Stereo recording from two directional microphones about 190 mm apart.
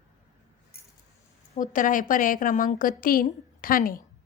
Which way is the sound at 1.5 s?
45° left (ahead or behind).